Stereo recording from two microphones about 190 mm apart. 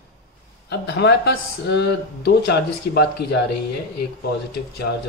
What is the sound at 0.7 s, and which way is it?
Speech, 60° left (ahead or behind).